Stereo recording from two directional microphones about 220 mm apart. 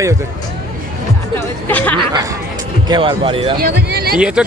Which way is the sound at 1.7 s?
5° left (ahead or behind).